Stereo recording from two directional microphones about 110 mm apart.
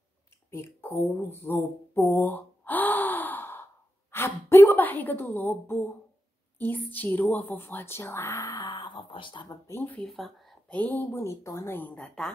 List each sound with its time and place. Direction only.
0.5 s a sound: 25° left (ahead or behind)
6.6 s speech: 15° left (ahead or behind); by 9.6 s 45° left (ahead or behind)
9.7 s speech: 20° left (ahead or behind)
10.0 s speech: centre (ahead or behind)
10.8 s speech: 20° left (ahead or behind)